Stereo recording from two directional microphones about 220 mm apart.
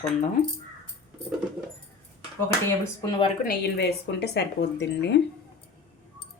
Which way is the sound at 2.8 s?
20° left (ahead or behind).